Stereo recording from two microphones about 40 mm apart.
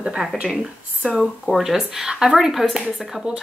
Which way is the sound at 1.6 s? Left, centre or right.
Centre.